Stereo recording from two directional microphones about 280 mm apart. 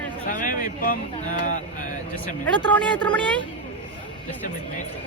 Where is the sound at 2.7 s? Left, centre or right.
Centre.